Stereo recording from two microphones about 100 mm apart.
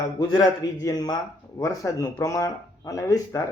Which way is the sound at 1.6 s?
30° left (ahead or behind).